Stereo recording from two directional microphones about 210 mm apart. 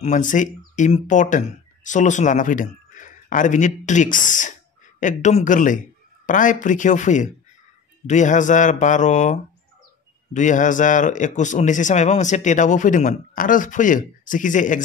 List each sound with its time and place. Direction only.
0.0 s a man's voice: 35° left (ahead or behind)